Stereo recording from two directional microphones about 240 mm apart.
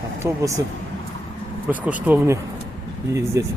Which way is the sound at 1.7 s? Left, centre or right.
Centre.